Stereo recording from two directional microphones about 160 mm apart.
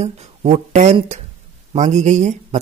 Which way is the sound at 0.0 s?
40° right (ahead or behind).